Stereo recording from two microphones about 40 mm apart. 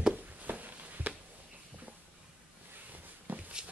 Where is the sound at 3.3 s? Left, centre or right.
Right.